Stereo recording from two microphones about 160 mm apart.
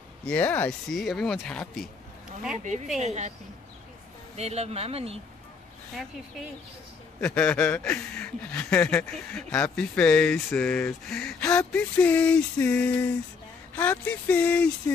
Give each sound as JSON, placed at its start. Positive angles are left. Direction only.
{"t": 0.2, "sound": "a man's voice", "side_deg": 10}
{"t": 3.0, "sound": "speech", "side_deg": -45}
{"t": 4.4, "sound": "speech", "side_deg": -40}
{"t": 7.2, "sound": "a man's voice", "side_deg": 5}